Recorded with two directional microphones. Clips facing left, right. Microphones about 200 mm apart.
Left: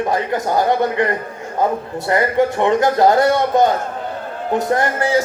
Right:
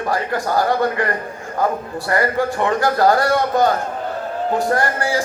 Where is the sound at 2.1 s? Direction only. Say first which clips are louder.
Left 3 dB; 20° left (ahead or behind).